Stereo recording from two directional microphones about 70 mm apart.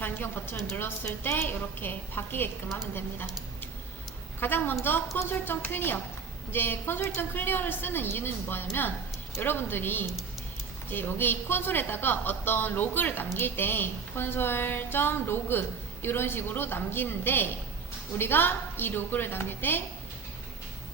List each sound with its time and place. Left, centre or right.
0.0 s speech: left
4.4 s speech: left